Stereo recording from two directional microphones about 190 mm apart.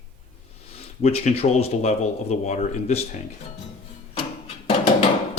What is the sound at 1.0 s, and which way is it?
Speech, 35° left (ahead or behind).